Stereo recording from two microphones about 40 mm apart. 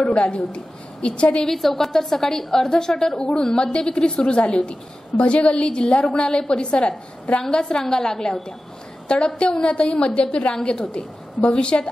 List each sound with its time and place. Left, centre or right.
0.0 s a woman's voice: left
1.4 s a woman's voice: centre; by 11.9 s left